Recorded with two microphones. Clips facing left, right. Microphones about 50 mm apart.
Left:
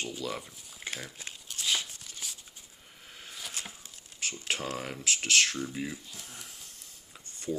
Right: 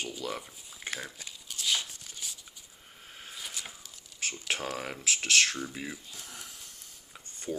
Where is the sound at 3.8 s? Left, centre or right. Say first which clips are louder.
Even; left.